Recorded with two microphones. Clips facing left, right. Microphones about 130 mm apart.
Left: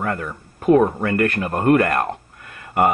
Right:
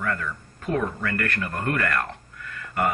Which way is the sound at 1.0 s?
25° left (ahead or behind).